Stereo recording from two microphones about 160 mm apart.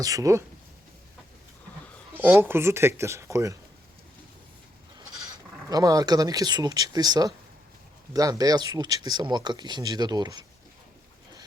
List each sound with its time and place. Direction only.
0.0 s speech: 20° right (ahead or behind)
2.1 s speech: 10° right (ahead or behind)
5.6 s speech: 20° right (ahead or behind)